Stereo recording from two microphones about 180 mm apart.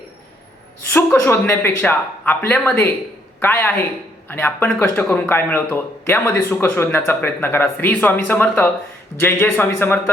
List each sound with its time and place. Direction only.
0.9 s speech: 15° left (ahead or behind)